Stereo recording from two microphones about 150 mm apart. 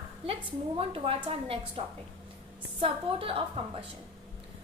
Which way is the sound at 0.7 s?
35° right (ahead or behind).